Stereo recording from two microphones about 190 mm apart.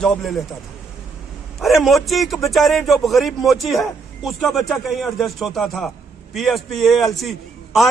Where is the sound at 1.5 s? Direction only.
Centre (ahead or behind).